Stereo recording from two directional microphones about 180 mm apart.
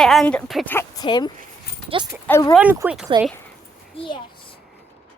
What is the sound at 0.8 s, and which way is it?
Speech, 20° left (ahead or behind).